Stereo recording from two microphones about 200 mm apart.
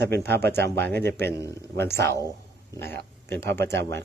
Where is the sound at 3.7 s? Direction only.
60° right (ahead or behind).